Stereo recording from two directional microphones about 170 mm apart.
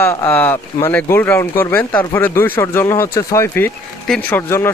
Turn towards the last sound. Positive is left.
turn(degrees=15)  # may be behind; listen again after turning